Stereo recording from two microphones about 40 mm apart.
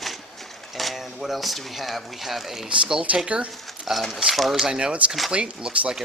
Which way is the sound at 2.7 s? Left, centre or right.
Right.